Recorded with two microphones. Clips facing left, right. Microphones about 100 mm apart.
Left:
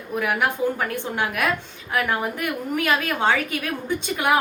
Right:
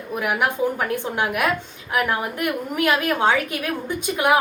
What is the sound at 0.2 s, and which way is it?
A woman's voice, 10° right (ahead or behind).